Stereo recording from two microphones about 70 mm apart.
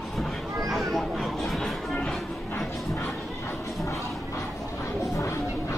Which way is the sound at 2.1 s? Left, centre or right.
Centre.